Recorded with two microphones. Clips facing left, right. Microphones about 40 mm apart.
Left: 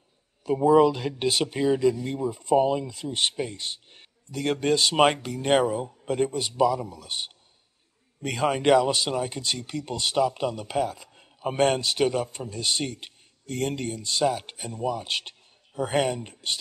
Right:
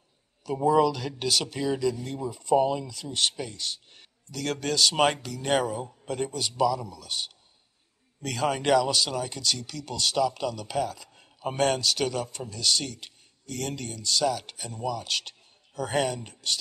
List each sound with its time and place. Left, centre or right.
0.6 s a man's voice: left